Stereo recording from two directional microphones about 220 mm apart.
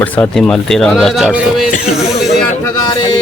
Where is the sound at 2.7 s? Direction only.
20° left (ahead or behind).